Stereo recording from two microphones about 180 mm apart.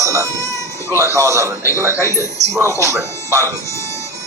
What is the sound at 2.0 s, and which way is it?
Speech, 15° left (ahead or behind).